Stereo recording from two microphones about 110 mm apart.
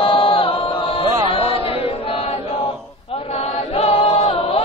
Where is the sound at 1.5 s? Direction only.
60° left (ahead or behind).